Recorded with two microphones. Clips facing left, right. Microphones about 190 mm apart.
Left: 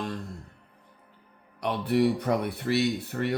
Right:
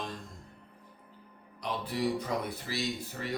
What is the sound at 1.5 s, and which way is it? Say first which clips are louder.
Speech: left 9 dB; 65° left (ahead or behind).